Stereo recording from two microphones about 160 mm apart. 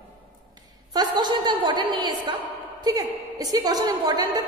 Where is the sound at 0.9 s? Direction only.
25° right (ahead or behind).